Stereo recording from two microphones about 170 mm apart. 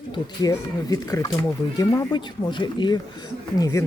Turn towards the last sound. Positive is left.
turn(degrees=20)  # may be behind; listen again after turning